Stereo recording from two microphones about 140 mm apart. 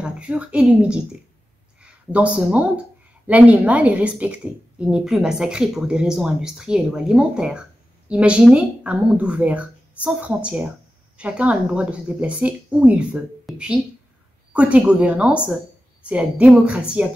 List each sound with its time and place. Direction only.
0.0 s a woman's voice: 5° right (ahead or behind)